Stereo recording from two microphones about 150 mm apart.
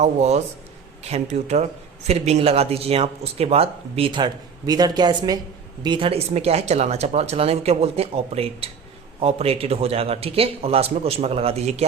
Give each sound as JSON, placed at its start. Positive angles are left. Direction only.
{"t": 0.0, "sound": "speech", "side_deg": -45}